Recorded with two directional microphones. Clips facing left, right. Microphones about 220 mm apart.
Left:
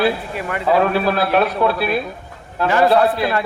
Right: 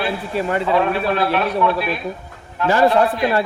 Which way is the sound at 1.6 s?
35° left (ahead or behind).